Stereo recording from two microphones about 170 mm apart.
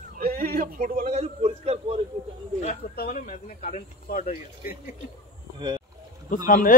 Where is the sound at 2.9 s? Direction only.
55° left (ahead or behind).